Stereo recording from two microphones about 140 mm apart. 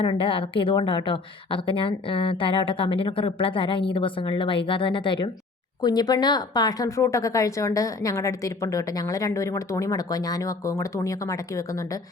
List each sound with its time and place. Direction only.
0.0 s a woman's voice: 40° left (ahead or behind); by 11.6 s 25° left (ahead or behind)